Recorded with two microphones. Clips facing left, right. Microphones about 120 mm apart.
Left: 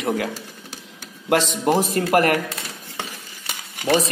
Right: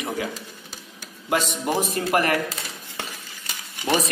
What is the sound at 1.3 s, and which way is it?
Speech, 75° left (ahead or behind).